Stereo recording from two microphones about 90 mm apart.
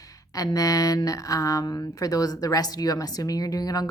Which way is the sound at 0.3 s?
40° left (ahead or behind).